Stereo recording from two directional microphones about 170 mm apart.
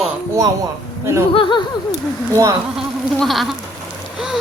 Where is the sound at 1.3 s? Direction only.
30° left (ahead or behind).